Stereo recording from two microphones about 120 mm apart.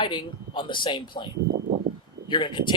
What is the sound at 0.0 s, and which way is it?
Speech, 40° left (ahead or behind).